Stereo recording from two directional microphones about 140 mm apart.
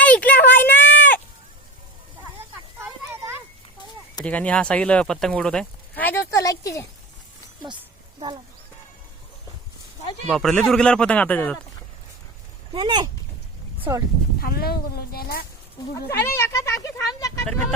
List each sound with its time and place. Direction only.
0.0 s a sound: 10° left (ahead or behind)
2.7 s a sound: 20° right (ahead or behind)
4.2 s speech: 10° left (ahead or behind)
10.3 s speech: 5° left (ahead or behind)
12.7 s speech: 35° right (ahead or behind)
14.4 s speech: 90° left
16.0 s speech: 20° left (ahead or behind)
17.4 s speech: 5° left (ahead or behind)